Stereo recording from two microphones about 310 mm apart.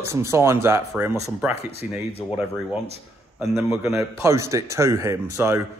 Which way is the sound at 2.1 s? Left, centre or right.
Centre.